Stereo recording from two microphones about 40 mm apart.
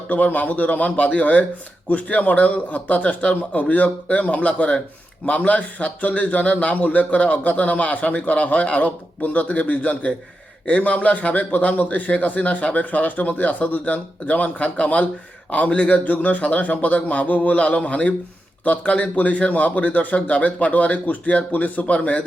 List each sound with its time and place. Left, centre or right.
0.1 s a man's voice: left
6.4 s a man's voice: left